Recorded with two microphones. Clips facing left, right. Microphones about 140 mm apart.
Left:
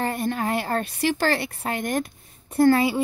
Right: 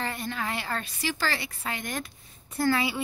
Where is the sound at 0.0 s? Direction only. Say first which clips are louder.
Left 7 dB; 50° left (ahead or behind).